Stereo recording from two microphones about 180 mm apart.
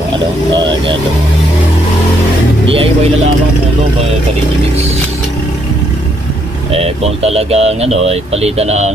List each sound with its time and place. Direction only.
2.7 s speech: 30° right (ahead or behind)
6.7 s speech: 35° right (ahead or behind)